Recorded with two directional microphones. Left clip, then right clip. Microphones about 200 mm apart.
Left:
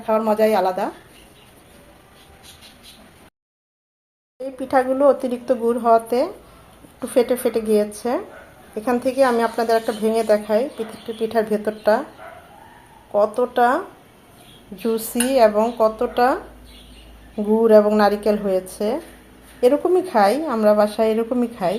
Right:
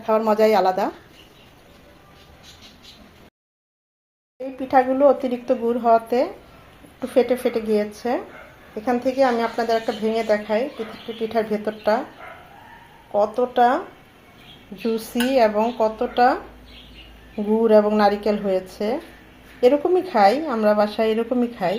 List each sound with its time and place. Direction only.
0.0 s a woman's voice: 15° right (ahead or behind)
4.6 s speech: centre (ahead or behind)
13.1 s speech: centre (ahead or behind)